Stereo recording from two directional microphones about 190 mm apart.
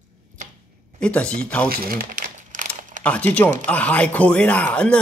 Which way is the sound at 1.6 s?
50° right (ahead or behind).